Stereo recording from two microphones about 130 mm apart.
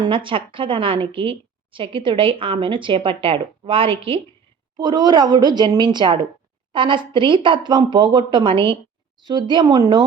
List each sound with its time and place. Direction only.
0.0 s a woman's voice: 40° right (ahead or behind)
4.8 s a woman's voice: 30° right (ahead or behind)